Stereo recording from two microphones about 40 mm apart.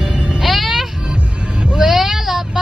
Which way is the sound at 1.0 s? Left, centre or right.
Right.